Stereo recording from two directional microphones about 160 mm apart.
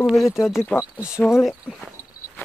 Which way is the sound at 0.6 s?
10° left (ahead or behind).